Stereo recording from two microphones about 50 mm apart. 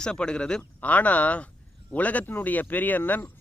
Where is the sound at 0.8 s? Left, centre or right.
Left.